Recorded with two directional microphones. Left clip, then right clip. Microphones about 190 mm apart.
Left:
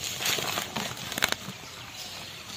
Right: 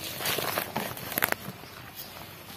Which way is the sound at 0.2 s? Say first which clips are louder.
Even; 35° right (ahead or behind).